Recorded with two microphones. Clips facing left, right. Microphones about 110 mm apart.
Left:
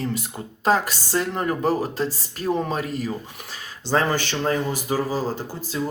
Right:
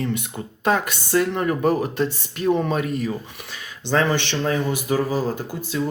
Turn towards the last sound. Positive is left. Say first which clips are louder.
# right 2 dB
turn(degrees=35)  # may be behind; listen again after turning